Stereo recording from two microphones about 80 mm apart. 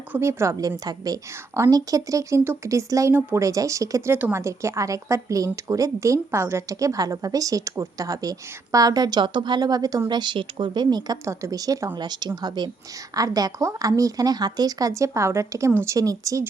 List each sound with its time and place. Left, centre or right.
0.2 s speech: right
0.9 s speech: right
3.1 s speech: right
3.4 s speech: right
4.1 s speech: right
10.1 s a woman's voice: right
11.3 s speech: right
11.9 s a woman's voice: right
13.1 s speech: right
16.0 s speech: right